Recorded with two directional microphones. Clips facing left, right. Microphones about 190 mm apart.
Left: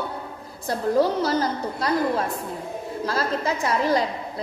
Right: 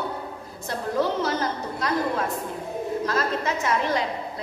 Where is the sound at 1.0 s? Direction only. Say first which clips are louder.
Left 2 dB; 35° left (ahead or behind).